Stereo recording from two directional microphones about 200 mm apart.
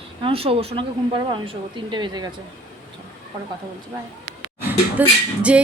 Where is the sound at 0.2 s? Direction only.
25° right (ahead or behind).